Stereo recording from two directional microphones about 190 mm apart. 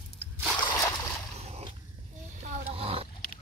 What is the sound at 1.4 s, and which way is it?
Dog, 35° right (ahead or behind).